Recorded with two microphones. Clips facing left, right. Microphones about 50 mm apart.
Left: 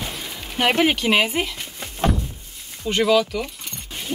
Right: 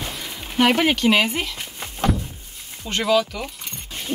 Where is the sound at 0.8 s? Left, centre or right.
Centre.